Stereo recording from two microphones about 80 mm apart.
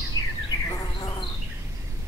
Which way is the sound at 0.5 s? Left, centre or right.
Left.